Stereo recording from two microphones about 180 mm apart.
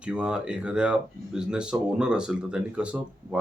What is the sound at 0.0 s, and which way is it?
Speech, 5° right (ahead or behind).